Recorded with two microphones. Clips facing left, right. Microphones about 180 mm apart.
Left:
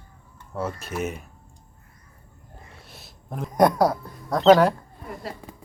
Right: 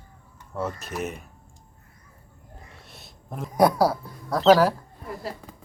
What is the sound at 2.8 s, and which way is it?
Speech, centre (ahead or behind).